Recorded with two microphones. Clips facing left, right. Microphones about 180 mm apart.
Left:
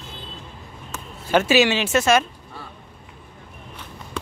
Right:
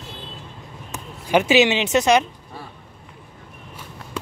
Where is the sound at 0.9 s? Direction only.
15° right (ahead or behind).